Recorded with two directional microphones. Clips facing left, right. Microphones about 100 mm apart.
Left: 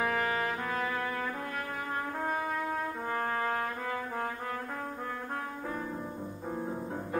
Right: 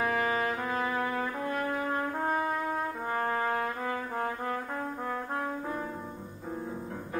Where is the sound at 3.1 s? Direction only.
20° right (ahead or behind).